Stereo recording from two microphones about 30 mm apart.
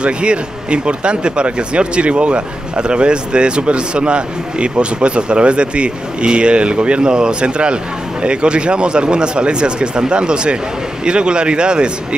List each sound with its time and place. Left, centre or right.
0.0 s speech: right